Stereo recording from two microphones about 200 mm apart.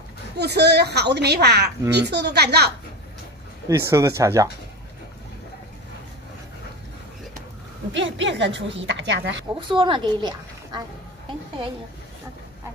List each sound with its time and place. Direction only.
0.4 s a woman's voice: 55° right (ahead or behind)
3.6 s speech: 15° right (ahead or behind)
7.9 s a woman's voice: 65° right (ahead or behind)
9.6 s speech: 25° right (ahead or behind)